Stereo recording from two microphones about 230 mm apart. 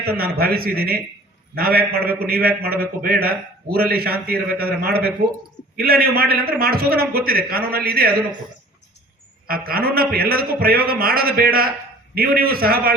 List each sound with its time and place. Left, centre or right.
0.0 s a man's voice: right
9.5 s a man's voice: right